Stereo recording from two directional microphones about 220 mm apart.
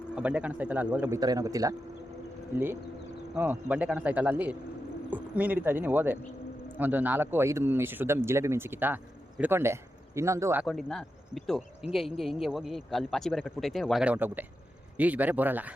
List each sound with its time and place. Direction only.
0.2 s a man's voice: 5° right (ahead or behind)
3.3 s a man's voice: 5° right (ahead or behind)
10.7 s a man's voice: centre (ahead or behind)